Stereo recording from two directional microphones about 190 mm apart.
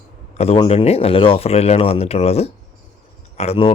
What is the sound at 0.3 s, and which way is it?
Speech, 30° left (ahead or behind).